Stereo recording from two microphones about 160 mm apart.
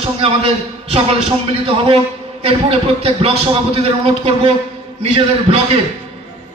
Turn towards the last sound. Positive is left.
turn(degrees=-35)  # may be behind; listen again after turning